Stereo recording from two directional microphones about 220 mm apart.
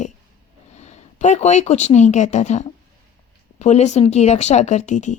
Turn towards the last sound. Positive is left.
turn(degrees=35)  # may be behind; listen again after turning